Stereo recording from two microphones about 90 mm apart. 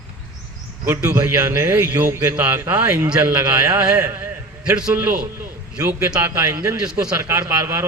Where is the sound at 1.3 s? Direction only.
30° right (ahead or behind); by 4.9 s 10° right (ahead or behind).